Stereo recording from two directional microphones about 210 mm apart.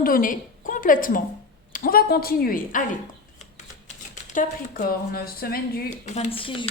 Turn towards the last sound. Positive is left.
turn(degrees=25)  # may be behind; listen again after turning